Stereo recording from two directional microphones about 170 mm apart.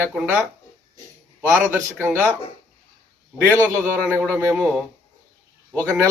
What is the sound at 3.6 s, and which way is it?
Speech, 10° right (ahead or behind).